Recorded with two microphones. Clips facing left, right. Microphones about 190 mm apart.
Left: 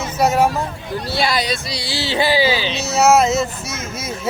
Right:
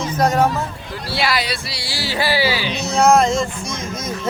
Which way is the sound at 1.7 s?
20° left (ahead or behind).